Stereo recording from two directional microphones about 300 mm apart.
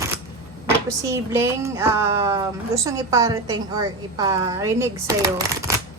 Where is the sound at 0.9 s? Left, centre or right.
Centre.